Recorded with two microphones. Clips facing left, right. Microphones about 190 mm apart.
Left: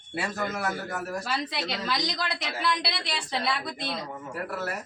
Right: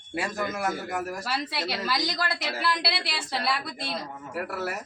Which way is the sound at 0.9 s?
5° right (ahead or behind).